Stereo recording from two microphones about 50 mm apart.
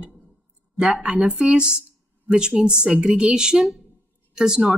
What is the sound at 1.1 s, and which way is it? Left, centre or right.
Speech, right.